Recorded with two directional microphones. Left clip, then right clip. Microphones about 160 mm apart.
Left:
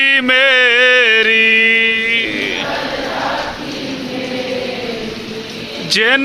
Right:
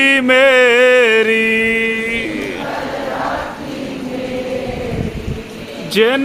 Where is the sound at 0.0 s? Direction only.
5° right (ahead or behind).